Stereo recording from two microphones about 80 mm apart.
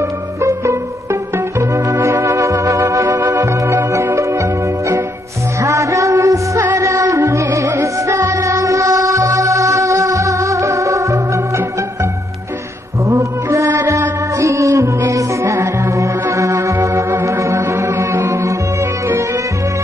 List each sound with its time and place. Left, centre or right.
0.4 s music: right
2.0 s music: right
13.5 s music: right